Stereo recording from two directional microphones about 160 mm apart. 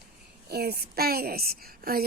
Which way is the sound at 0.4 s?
80° right.